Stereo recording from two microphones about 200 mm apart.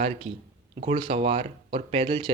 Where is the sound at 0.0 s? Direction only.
30° right (ahead or behind).